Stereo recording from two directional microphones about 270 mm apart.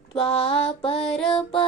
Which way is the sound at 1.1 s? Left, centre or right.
Centre.